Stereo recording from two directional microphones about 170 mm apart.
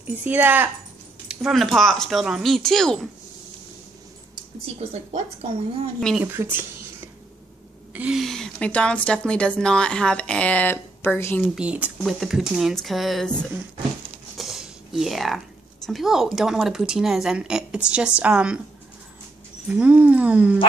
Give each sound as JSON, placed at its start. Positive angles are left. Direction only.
{"t": 0.0, "sound": "a woman's voice", "side_deg": -10}
{"t": 4.6, "sound": "a woman's voice", "side_deg": -40}
{"t": 5.9, "sound": "a woman's voice", "side_deg": 0}
{"t": 6.2, "sound": "speech", "side_deg": -10}
{"t": 7.9, "sound": "a woman's voice", "side_deg": -5}
{"t": 11.4, "sound": "a woman's voice", "side_deg": -5}
{"t": 14.3, "sound": "speech", "side_deg": 0}
{"t": 19.7, "sound": "speech", "side_deg": -10}